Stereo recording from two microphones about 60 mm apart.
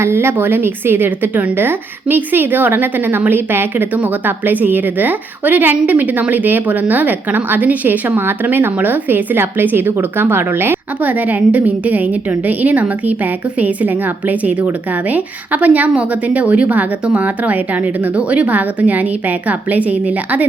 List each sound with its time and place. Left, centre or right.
0.0 s a woman's voice: right